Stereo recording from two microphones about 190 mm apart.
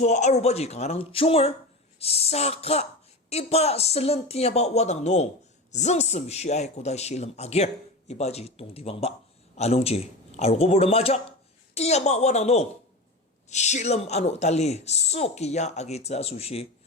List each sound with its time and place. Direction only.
0.0 s a man's voice: 40° left (ahead or behind)